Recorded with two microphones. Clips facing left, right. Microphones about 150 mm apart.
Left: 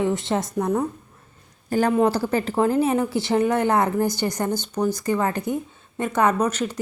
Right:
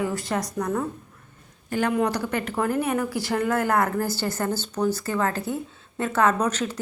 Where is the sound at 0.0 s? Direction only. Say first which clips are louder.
Left 4 dB; 25° left (ahead or behind).